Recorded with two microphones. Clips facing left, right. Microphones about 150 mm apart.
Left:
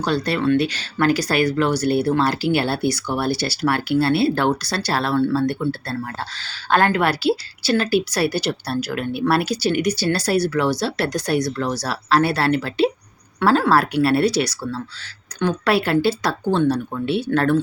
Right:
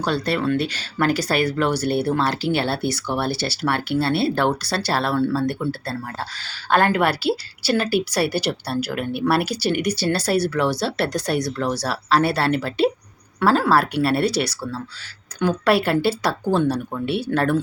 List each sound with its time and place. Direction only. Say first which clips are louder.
0.0 s speech: left 1 dB; centre (ahead or behind)